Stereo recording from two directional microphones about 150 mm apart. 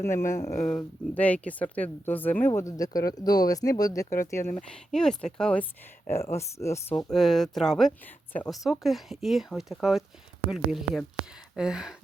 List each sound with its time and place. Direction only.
0.0 s speech: 15° left (ahead or behind)
4.7 s speech: 5° left (ahead or behind)
6.3 s speech: 20° left (ahead or behind)
6.9 s speech: centre (ahead or behind)